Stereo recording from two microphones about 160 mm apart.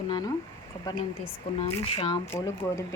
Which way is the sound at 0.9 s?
35° left (ahead or behind).